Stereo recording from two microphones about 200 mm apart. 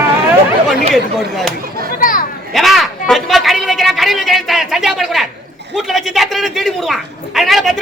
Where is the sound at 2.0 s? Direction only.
40° left (ahead or behind).